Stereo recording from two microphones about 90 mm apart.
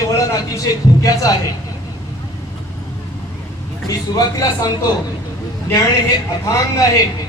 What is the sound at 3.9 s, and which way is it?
Speech, 45° left (ahead or behind).